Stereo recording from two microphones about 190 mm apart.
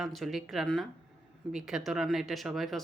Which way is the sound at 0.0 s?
Centre (ahead or behind).